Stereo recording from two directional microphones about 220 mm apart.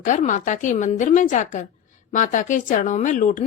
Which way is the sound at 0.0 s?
35° left (ahead or behind).